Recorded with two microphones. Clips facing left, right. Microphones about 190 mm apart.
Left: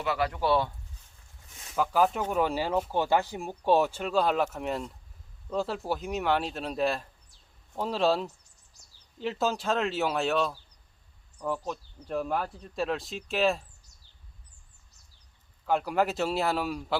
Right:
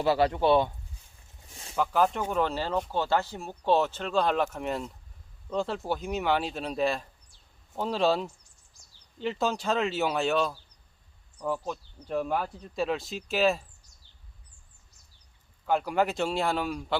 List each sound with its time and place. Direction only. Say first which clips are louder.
0.0 s speech: right 5 dB; 30° right (ahead or behind)
1.5 s a sound: right 3 dB; 30° right (ahead or behind)
1.7 s speech: even; 5° left (ahead or behind)
15.6 s speech: even; centre (ahead or behind)